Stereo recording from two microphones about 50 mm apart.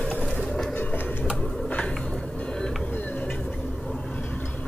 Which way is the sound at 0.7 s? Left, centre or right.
Left.